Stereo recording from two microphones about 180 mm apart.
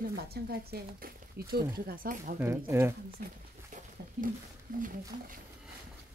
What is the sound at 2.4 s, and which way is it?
Speech, 15° right (ahead or behind).